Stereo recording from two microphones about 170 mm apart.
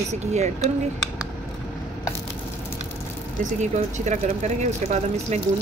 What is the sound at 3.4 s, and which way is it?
Speech, 45° right (ahead or behind).